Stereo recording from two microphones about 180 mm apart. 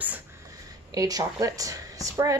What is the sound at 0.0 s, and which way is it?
Speech, 10° right (ahead or behind).